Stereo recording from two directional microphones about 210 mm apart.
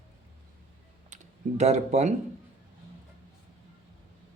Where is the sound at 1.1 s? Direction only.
35° right (ahead or behind).